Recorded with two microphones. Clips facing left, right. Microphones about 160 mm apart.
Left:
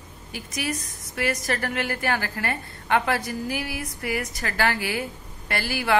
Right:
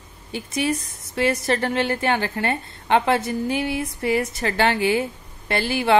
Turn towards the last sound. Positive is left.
turn(degrees=-25)  # may be behind; listen again after turning